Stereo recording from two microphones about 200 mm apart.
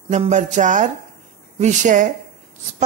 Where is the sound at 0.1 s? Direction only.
35° right (ahead or behind).